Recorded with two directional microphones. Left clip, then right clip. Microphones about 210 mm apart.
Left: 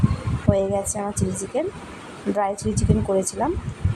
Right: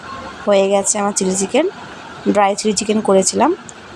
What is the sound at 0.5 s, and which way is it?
Speech, 15° right (ahead or behind).